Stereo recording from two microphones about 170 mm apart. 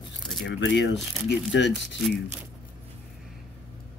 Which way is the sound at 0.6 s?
90° left.